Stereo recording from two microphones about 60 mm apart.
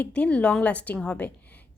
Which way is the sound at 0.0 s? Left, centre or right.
Left.